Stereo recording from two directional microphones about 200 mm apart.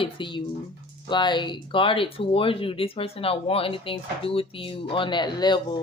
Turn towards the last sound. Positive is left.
turn(degrees=20)  # may be behind; listen again after turning